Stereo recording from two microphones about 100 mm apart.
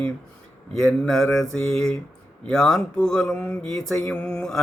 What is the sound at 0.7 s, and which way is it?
Mantra, 5° left (ahead or behind).